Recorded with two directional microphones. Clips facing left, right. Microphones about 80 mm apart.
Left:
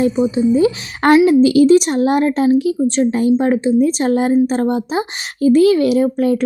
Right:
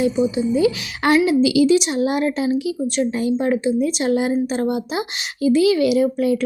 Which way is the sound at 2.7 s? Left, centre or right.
Left.